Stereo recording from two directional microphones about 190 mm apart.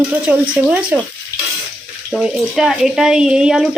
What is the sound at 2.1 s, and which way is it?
Speech, centre (ahead or behind).